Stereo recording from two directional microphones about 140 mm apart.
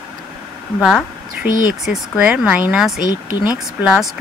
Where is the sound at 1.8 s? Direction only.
5° right (ahead or behind).